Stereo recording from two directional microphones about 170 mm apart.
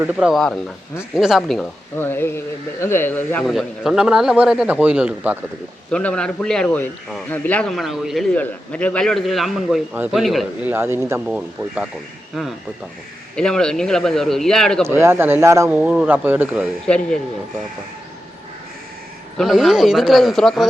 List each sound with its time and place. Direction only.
0.0 s a man's voice: 5° right (ahead or behind)
2.0 s speech: 15° left (ahead or behind)
3.5 s a man's voice: centre (ahead or behind)
5.9 s a man's voice: 5° left (ahead or behind)
10.7 s speech: 15° right (ahead or behind)
11.3 s a man's voice: 5° right (ahead or behind)
14.8 s speech: 15° right (ahead or behind)
15.8 s speech: 5° right (ahead or behind)
16.8 s a man's voice: 5° left (ahead or behind)
19.4 s a man's voice: 5° right (ahead or behind)